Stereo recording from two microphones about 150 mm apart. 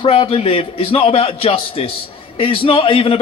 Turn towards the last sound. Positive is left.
turn(degrees=40)  # may be behind; listen again after turning